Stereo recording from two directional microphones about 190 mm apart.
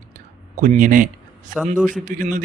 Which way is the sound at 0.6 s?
40° right (ahead or behind).